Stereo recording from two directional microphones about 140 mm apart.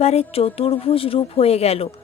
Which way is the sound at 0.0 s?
45° left (ahead or behind).